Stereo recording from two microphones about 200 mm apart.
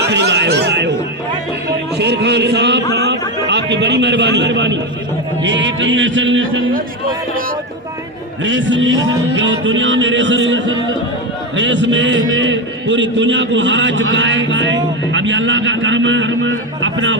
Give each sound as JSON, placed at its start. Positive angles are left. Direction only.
{"t": 0.0, "sound": "a man's voice", "side_deg": -60}
{"t": 2.0, "sound": "a man's voice", "side_deg": -60}
{"t": 8.4, "sound": "a man's voice", "side_deg": -65}